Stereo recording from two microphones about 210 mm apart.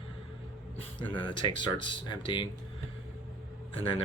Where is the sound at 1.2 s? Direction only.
20° left (ahead or behind).